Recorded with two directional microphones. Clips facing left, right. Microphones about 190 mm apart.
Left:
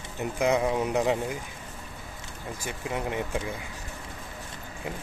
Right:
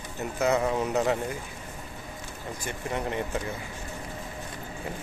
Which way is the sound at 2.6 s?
10° left (ahead or behind).